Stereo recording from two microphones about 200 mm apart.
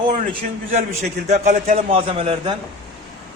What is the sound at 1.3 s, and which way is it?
A man's voice, 35° right (ahead or behind).